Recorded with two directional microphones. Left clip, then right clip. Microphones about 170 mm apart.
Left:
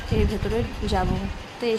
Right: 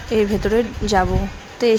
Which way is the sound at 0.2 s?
35° right (ahead or behind).